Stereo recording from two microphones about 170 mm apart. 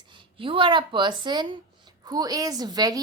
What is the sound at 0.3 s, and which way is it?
Speech, 30° right (ahead or behind).